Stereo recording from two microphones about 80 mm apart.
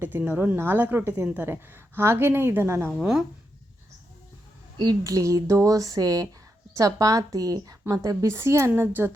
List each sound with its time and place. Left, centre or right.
0.0 s a woman's voice: right
3.0 s speech: centre
5.0 s a woman's voice: right
8.7 s a woman's voice: right